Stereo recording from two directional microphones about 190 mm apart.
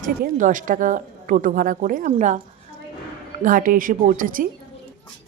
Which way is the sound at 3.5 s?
45° right (ahead or behind).